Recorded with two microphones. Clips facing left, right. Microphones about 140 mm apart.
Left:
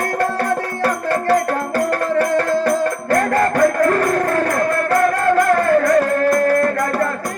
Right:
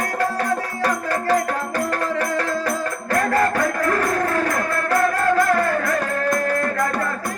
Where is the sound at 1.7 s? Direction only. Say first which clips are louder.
Left 6 dB; 45° left (ahead or behind).